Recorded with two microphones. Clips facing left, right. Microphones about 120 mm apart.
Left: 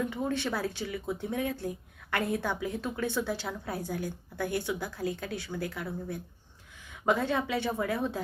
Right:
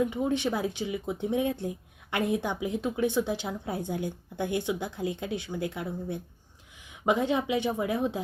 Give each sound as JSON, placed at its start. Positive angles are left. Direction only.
{"t": 0.0, "sound": "speech", "side_deg": -15}